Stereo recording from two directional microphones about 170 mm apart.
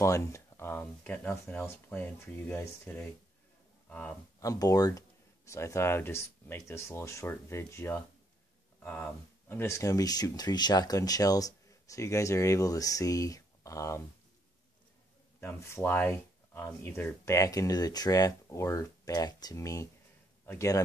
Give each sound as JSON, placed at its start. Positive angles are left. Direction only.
{"t": 0.0, "sound": "speech", "side_deg": 15}
{"t": 4.4, "sound": "speech", "side_deg": 20}
{"t": 15.4, "sound": "a man's voice", "side_deg": 15}